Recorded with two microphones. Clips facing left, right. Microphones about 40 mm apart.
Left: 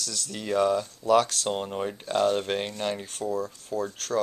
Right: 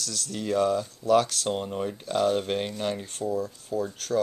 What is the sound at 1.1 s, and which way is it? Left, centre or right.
Speech, left.